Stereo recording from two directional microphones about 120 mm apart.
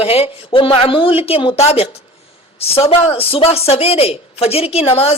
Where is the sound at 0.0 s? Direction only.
55° left (ahead or behind).